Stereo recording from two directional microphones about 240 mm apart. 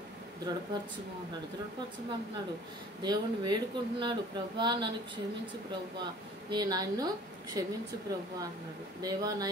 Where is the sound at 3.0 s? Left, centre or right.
Centre.